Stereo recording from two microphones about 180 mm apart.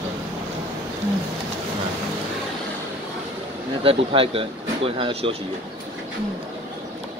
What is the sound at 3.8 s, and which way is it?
Speech, 30° right (ahead or behind).